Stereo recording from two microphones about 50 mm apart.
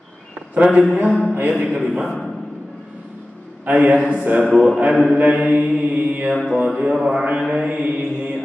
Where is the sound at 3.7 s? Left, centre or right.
Right.